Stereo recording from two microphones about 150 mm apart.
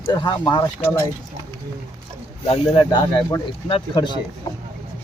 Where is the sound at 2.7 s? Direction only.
30° left (ahead or behind).